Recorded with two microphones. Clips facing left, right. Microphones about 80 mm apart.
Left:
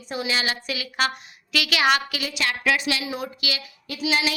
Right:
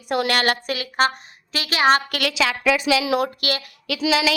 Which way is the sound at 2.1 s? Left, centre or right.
Right.